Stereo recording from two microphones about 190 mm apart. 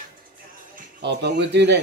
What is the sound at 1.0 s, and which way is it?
Speech, 65° right (ahead or behind).